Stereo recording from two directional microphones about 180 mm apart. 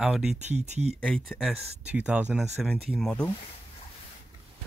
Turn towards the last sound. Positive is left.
turn(degrees=5)  # may be behind; listen again after turning